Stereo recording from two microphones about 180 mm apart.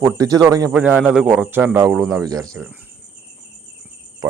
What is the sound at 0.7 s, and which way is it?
Speech, 5° right (ahead or behind).